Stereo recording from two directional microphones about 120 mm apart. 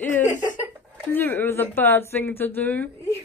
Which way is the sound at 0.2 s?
90° left.